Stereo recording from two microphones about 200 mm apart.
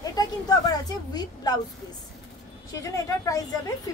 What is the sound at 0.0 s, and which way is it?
A woman's voice, 20° left (ahead or behind).